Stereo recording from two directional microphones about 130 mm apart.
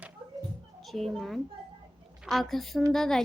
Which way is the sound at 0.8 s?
Centre (ahead or behind).